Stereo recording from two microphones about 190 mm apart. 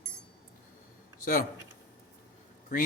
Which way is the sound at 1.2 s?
45° left (ahead or behind).